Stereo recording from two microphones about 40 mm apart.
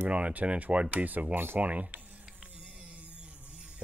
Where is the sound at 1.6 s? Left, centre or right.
Right.